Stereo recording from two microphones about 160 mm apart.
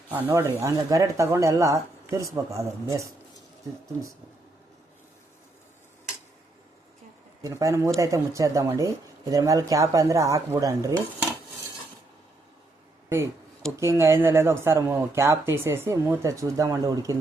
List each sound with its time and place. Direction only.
0.1 s speech: 15° right (ahead or behind)
7.4 s speech: 20° right (ahead or behind)
13.7 s speech: 20° right (ahead or behind)